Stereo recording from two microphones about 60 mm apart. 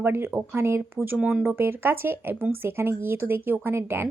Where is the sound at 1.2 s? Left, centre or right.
Centre.